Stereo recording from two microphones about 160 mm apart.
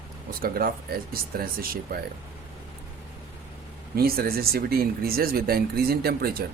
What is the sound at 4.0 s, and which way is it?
Speech, 70° right (ahead or behind).